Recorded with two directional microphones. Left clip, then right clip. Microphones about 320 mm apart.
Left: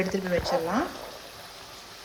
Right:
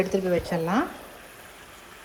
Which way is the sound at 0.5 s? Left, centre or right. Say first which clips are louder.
Left 1 dB; right.